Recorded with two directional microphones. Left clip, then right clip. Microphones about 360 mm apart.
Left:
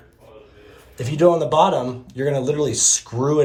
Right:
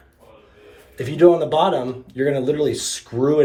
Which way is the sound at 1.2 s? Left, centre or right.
Left.